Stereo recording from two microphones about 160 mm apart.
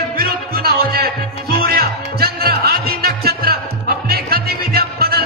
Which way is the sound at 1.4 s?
70° right (ahead or behind).